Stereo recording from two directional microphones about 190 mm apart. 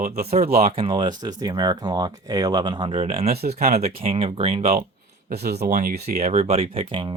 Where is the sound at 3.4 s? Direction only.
55° right (ahead or behind).